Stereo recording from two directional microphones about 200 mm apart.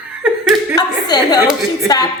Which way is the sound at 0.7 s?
20° left (ahead or behind).